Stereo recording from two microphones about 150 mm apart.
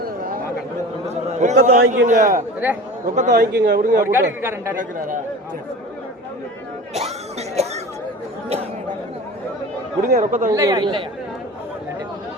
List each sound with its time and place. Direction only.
1.0 s a man's voice: 50° right (ahead or behind)
3.2 s a man's voice: 70° right (ahead or behind)
4.0 s speech: 15° right (ahead or behind)
4.8 s speech: 60° right (ahead or behind)
6.9 s speech: 45° right (ahead or behind)
10.1 s a man's voice: 70° right (ahead or behind)
10.5 s a man's voice: 20° right (ahead or behind)